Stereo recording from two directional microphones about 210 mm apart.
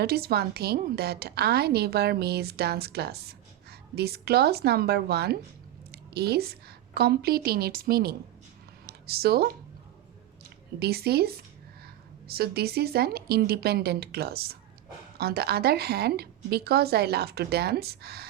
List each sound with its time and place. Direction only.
0.0 s a woman's voice: 50° right (ahead or behind)
10.8 s a woman's voice: 50° right (ahead or behind)